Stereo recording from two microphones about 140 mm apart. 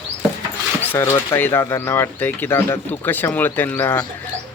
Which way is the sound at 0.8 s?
15° left (ahead or behind).